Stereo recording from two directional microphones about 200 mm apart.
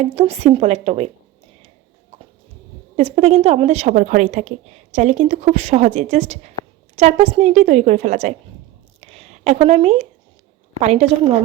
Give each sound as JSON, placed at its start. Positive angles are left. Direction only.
{"t": 0.0, "sound": "a woman's voice", "side_deg": -30}
{"t": 2.9, "sound": "a woman's voice", "side_deg": -30}
{"t": 9.0, "sound": "a sound", "side_deg": -30}
{"t": 10.8, "sound": "a woman's voice", "side_deg": -30}